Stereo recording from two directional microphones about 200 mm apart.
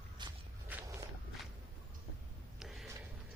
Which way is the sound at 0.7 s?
10° right (ahead or behind).